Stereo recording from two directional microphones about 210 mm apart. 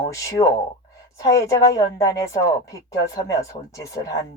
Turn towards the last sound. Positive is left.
turn(degrees=15)  # may be behind; listen again after turning